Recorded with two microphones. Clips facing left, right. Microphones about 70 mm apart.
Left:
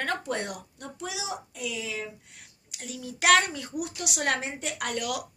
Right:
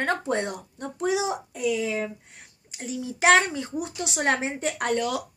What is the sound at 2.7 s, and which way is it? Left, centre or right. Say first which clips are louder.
Speech: right 6 dB; right.